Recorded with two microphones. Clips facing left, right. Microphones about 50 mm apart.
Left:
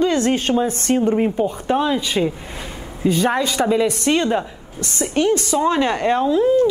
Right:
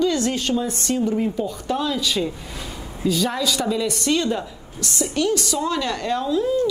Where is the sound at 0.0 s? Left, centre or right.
Left.